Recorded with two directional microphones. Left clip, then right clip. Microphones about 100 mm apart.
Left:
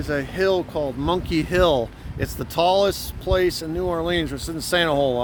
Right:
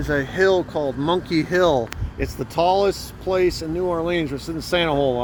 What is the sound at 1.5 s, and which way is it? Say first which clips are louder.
Speech: even; 35° left (ahead or behind).